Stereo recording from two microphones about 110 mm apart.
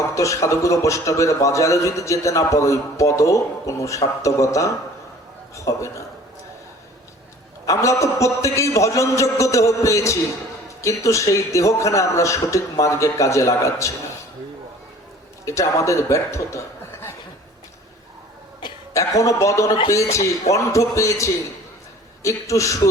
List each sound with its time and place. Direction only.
0.0 s a man's voice: 30° left (ahead or behind)
7.7 s a man's voice: 30° left (ahead or behind)
15.4 s a man's voice: 30° left (ahead or behind)
18.9 s a man's voice: 30° left (ahead or behind)